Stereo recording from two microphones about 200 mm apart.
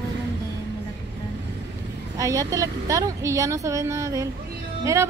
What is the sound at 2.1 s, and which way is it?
A woman's voice, 15° right (ahead or behind).